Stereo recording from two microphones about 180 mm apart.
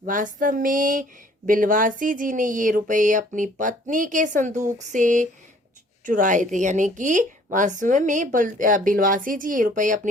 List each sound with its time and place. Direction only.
0.0 s a woman's voice: 45° right (ahead or behind)